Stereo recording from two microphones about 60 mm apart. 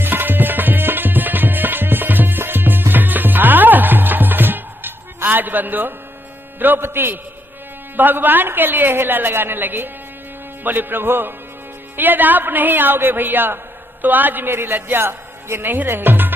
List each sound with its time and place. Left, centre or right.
0.0 s tabla: right
6.6 s a man's voice: right